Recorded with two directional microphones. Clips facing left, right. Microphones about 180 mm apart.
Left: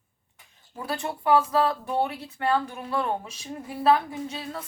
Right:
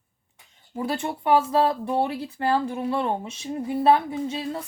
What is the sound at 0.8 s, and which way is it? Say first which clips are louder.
Speech: right 4 dB; 25° right (ahead or behind).